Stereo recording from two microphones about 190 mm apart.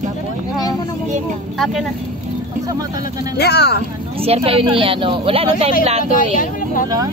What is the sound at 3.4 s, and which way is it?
Speech, 60° left (ahead or behind).